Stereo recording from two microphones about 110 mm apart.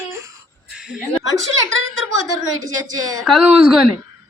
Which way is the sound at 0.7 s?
5° right (ahead or behind).